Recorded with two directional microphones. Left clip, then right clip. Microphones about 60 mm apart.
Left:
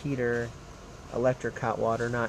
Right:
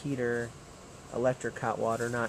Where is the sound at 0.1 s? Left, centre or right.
Centre.